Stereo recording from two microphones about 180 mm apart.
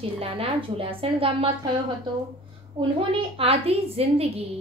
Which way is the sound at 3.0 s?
30° right (ahead or behind).